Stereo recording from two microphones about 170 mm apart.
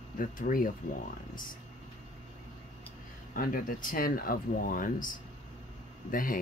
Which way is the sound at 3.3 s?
55° left (ahead or behind).